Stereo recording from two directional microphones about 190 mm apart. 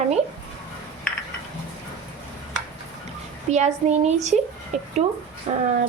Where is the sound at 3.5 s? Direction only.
35° right (ahead or behind).